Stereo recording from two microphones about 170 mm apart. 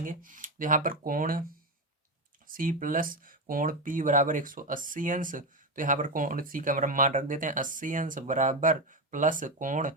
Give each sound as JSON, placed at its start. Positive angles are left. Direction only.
{"t": 0.0, "sound": "speech", "side_deg": -50}
{"t": 2.5, "sound": "speech", "side_deg": -55}